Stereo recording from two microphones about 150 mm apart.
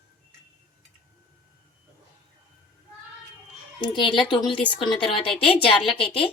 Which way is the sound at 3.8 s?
30° left (ahead or behind).